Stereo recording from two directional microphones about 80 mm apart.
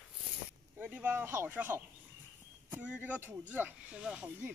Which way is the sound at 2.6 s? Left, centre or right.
Right.